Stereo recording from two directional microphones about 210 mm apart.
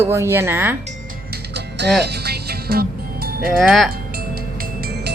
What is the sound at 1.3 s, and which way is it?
Music, 50° right (ahead or behind).